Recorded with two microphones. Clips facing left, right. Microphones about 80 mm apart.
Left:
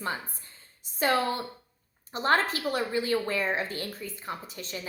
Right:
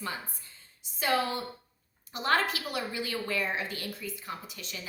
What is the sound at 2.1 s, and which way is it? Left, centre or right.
A woman's voice, left.